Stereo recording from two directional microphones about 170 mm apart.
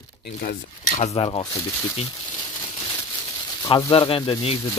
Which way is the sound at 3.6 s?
25° left (ahead or behind).